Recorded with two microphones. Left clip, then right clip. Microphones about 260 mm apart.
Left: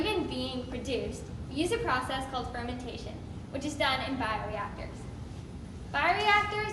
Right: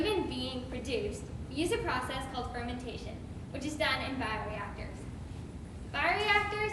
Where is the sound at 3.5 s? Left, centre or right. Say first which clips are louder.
Left 3 dB; centre.